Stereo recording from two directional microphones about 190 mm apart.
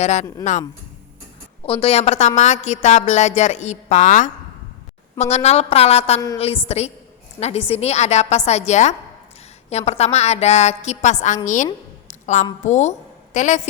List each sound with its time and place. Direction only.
0.0 s a woman's voice: 35° left (ahead or behind)
1.6 s a woman's voice: 30° left (ahead or behind)
11.4 s a sound: 40° left (ahead or behind)
12.6 s a woman's voice: 40° left (ahead or behind)